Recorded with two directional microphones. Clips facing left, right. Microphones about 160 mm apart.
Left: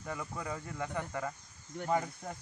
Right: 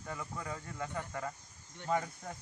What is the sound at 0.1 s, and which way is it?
Speech, 20° left (ahead or behind).